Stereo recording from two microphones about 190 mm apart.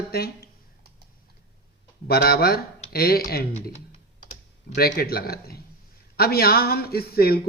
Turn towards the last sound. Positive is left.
turn(degrees=55)  # may be behind; listen again after turning